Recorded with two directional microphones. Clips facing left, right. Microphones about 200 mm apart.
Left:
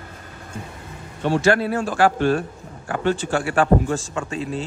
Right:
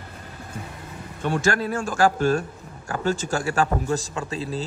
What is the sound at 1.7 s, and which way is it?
A man's voice, 45° right (ahead or behind).